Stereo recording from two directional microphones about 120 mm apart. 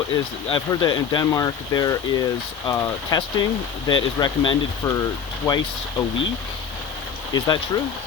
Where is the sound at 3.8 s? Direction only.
40° left (ahead or behind).